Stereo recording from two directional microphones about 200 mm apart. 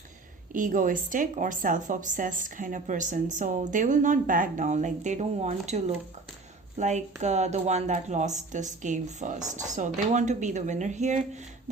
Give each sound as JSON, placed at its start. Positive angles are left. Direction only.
{"t": 0.5, "sound": "speech", "side_deg": -40}